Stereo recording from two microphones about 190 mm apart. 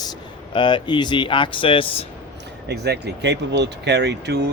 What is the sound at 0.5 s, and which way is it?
Speech, 25° left (ahead or behind).